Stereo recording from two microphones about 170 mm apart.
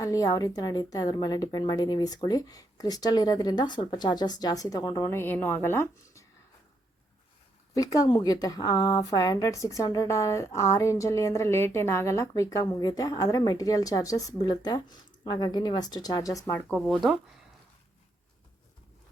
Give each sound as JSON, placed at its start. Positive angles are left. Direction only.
{"t": 0.0, "sound": "a woman's voice", "side_deg": 20}
{"t": 5.1, "sound": "a woman's voice", "side_deg": 10}
{"t": 7.7, "sound": "a woman's voice", "side_deg": 20}